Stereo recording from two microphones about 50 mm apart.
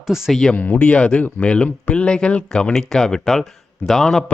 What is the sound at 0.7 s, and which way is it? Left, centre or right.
Speech, left.